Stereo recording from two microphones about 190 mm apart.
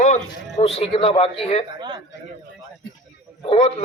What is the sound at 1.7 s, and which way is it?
Speech, 20° right (ahead or behind).